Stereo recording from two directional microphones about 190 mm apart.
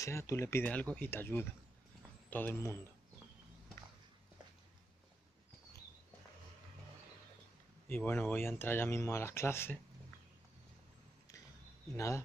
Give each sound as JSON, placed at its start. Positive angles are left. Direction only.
{"t": 0.0, "sound": "speech", "side_deg": 15}
{"t": 7.9, "sound": "speech", "side_deg": 10}